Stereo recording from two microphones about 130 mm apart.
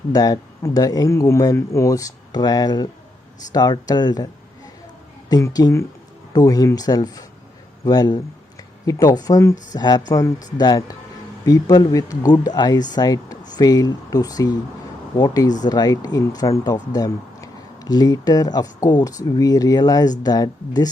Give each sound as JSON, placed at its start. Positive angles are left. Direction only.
{"t": 0.1, "sound": "speech", "side_deg": 30}
{"t": 5.3, "sound": "speech", "side_deg": 30}